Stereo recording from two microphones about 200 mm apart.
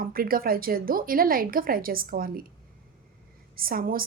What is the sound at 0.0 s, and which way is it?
A woman's voice, 45° right (ahead or behind).